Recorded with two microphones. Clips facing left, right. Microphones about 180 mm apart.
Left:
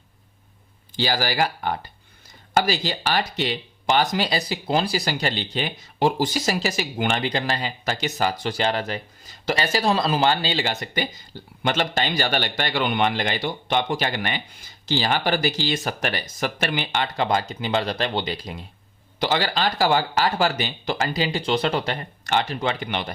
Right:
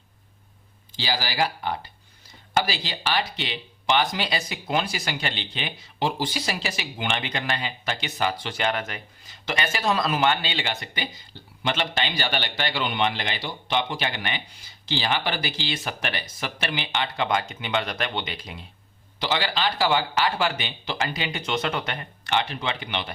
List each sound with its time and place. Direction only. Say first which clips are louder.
0.9 s a man's voice: left 4 dB; 50° left (ahead or behind)